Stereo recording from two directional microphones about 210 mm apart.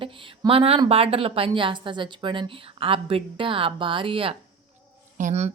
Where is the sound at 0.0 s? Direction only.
25° right (ahead or behind).